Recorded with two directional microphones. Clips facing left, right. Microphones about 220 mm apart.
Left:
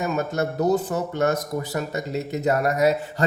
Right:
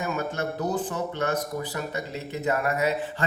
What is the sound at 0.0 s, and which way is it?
Speech, 40° left (ahead or behind).